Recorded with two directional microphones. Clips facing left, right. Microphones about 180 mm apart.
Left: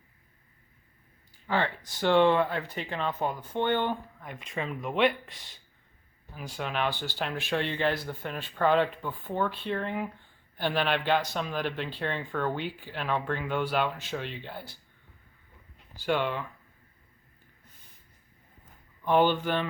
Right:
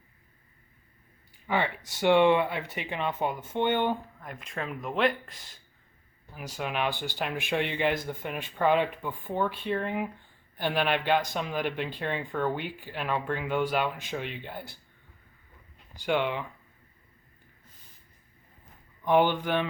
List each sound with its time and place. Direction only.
1.5 s speech: 15° right (ahead or behind)
4.2 s speech: centre (ahead or behind)
6.6 s speech: 10° right (ahead or behind)
16.0 s speech: 15° right (ahead or behind)
19.0 s speech: 15° right (ahead or behind)